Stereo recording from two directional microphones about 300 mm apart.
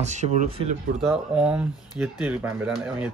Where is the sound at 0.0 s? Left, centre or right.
Right.